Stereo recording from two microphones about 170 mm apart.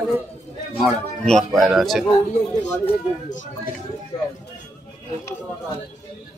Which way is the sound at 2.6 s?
10° left (ahead or behind).